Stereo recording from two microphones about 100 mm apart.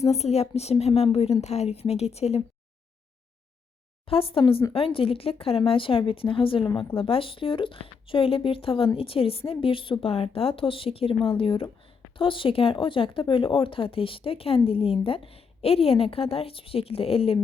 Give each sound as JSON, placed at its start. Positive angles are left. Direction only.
{"t": 0.0, "sound": "a woman's voice", "side_deg": 90}
{"t": 4.0, "sound": "speech", "side_deg": 70}